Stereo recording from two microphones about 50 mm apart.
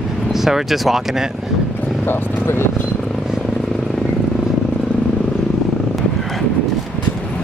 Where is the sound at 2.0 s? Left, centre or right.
Left.